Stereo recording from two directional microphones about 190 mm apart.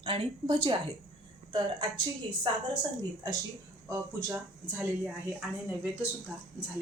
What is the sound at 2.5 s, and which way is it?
Speech, 25° right (ahead or behind).